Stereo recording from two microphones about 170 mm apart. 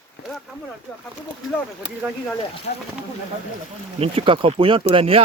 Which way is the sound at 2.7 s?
60° left (ahead or behind).